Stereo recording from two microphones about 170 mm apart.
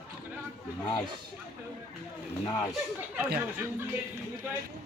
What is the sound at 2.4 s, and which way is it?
Speech, 20° left (ahead or behind).